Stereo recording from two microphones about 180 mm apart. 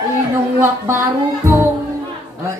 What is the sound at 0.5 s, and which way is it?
Speech, 15° right (ahead or behind).